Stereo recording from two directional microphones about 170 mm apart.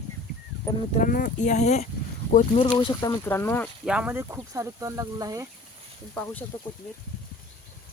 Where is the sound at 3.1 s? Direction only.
10° left (ahead or behind).